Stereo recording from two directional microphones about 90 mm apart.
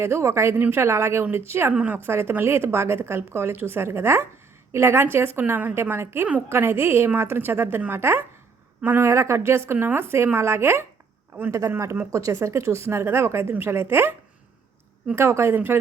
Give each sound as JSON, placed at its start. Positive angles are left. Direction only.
{"t": 0.0, "sound": "a woman's voice", "side_deg": -30}
{"t": 1.7, "sound": "a woman's voice", "side_deg": -15}
{"t": 2.0, "sound": "a woman's voice", "side_deg": -25}